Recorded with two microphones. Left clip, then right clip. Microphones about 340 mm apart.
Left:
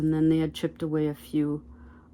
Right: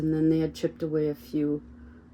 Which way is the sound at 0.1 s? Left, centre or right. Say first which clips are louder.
Right 1 dB; left.